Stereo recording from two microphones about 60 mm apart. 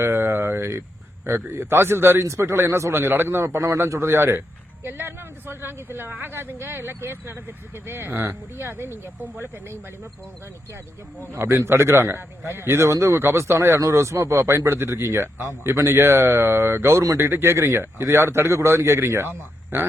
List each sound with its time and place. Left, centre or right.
0.0 s a sound: right
1.2 s a man's voice: right
11.3 s a man's voice: right